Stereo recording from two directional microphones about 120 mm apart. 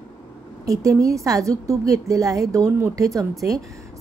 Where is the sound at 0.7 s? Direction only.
30° right (ahead or behind).